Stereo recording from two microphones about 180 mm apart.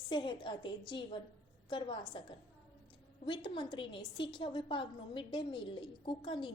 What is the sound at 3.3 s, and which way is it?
A woman's voice, 25° left (ahead or behind).